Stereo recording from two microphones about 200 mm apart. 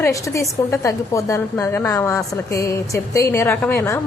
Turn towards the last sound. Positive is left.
turn(degrees=15)  # may be behind; listen again after turning